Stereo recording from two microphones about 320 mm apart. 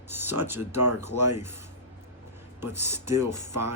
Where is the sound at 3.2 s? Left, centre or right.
Right.